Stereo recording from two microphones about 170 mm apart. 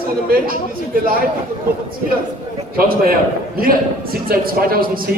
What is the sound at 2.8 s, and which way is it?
A man's voice, 60° right (ahead or behind).